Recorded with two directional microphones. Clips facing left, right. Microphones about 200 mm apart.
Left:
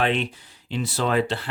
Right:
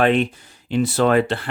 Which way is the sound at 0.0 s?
50° right (ahead or behind).